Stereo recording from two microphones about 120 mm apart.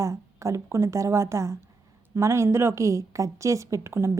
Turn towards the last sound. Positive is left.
turn(degrees=-25)  # may be behind; listen again after turning